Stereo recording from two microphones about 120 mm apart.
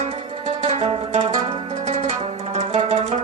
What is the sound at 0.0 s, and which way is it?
Zither, 65° right (ahead or behind).